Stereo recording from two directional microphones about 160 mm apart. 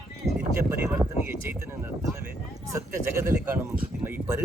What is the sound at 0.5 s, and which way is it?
Speech, 15° right (ahead or behind).